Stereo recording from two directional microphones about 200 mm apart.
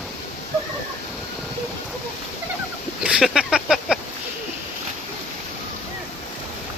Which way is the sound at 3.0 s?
5° right (ahead or behind).